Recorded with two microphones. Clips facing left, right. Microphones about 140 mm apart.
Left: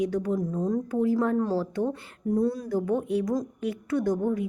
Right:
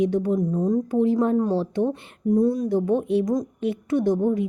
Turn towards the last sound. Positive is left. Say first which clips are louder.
# right 5 dB
turn(degrees=-20)  # may be behind; listen again after turning